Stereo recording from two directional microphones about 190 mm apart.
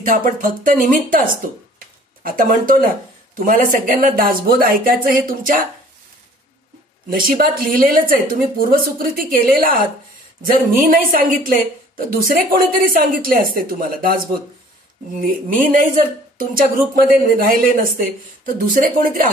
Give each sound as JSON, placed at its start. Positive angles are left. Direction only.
{"t": 0.0, "sound": "speech", "side_deg": -45}
{"t": 7.2, "sound": "speech", "side_deg": -50}
{"t": 10.8, "sound": "speech", "side_deg": -45}